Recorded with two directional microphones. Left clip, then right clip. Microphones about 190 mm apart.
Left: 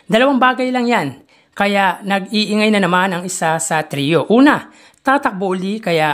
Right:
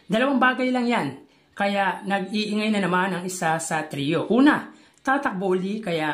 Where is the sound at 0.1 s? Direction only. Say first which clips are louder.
Left 8 dB; 30° left (ahead or behind).